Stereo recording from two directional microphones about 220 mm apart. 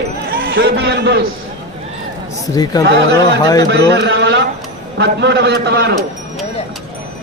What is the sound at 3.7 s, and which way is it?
A man's voice, 50° right (ahead or behind).